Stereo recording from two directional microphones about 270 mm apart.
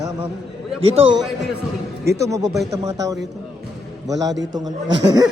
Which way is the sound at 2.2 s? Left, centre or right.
Centre.